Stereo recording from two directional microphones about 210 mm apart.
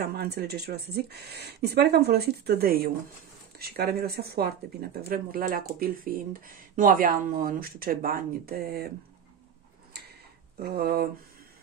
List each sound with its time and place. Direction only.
0.0 s speech: 50° right (ahead or behind)
10.6 s speech: 45° right (ahead or behind)